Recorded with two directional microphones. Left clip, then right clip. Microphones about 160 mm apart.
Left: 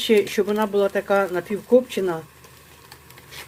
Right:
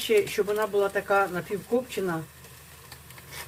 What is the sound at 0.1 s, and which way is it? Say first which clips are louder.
Speech: left 4 dB; 65° left (ahead or behind).